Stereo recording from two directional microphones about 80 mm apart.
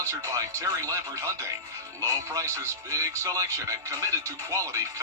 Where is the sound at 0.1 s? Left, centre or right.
Right.